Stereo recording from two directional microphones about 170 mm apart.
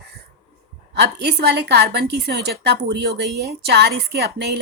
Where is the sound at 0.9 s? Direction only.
70° right (ahead or behind).